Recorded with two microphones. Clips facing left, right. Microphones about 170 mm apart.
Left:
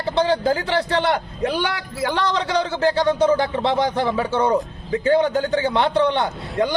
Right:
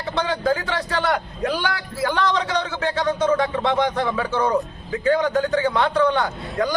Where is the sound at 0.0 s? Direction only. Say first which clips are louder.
Left 4 dB; 30° left (ahead or behind).